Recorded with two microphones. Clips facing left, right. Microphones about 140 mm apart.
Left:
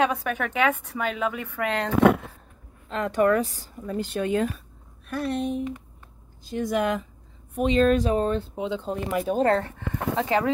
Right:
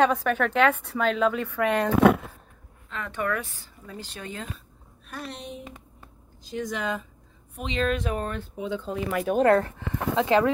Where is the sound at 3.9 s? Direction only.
55° left (ahead or behind); by 8.8 s 25° left (ahead or behind).